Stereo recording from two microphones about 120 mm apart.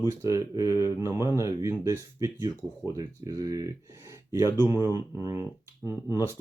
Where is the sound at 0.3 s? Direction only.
30° right (ahead or behind).